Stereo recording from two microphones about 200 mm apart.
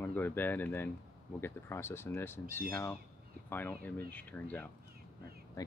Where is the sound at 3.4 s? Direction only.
10° left (ahead or behind).